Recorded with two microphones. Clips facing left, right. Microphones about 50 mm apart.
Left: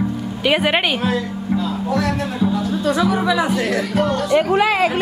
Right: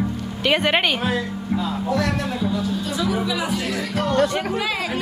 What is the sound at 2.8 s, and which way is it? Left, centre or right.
Speech, left.